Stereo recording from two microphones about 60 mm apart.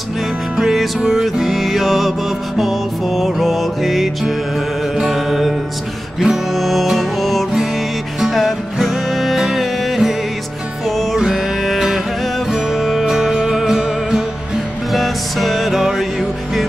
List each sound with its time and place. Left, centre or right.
0.6 s music: centre
11.1 s music: centre